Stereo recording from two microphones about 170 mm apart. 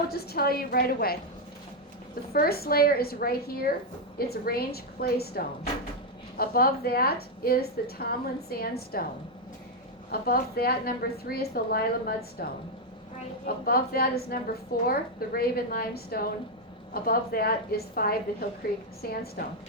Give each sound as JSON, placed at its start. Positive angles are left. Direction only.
{"t": 0.1, "sound": "a woman's voice", "side_deg": 65}
{"t": 2.3, "sound": "a woman's voice", "side_deg": 65}
{"t": 10.1, "sound": "a woman's voice", "side_deg": 60}